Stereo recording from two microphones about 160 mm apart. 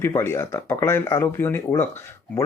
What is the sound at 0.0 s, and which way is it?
Speech, 15° left (ahead or behind).